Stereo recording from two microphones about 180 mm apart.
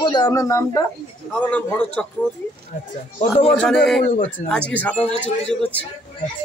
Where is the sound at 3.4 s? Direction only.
5° left (ahead or behind).